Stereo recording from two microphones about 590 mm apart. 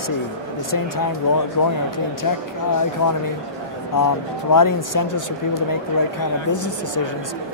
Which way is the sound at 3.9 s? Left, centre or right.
Left.